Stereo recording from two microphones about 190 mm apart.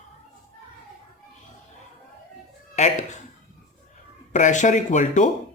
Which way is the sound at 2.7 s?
40° left (ahead or behind).